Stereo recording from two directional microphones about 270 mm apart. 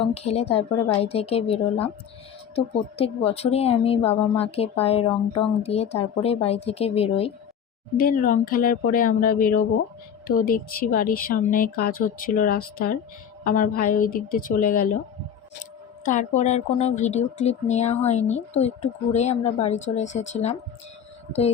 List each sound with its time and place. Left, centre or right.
0.0 s speech: left
7.9 s speech: left
16.0 s speech: left